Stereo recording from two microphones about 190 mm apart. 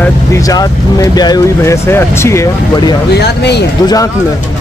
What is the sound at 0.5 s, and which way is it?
Speech, 20° left (ahead or behind).